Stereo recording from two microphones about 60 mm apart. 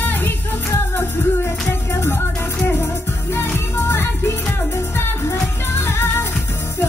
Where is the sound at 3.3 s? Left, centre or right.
Left.